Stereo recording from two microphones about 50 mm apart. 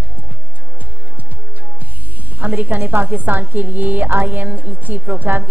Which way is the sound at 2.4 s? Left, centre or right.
Right.